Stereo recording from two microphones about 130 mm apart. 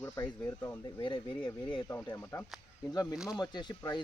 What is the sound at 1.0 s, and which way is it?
Speech, 40° left (ahead or behind).